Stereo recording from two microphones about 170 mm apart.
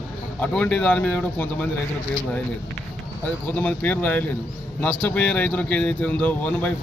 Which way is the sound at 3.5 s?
10° left (ahead or behind).